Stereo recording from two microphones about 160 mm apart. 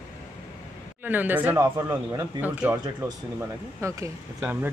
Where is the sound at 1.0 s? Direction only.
10° right (ahead or behind).